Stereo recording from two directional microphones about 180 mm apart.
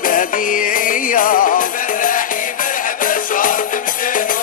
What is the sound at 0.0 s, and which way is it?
Music, 50° left (ahead or behind).